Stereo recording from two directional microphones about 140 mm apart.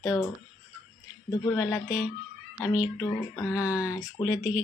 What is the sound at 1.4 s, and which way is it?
Speech, 15° left (ahead or behind).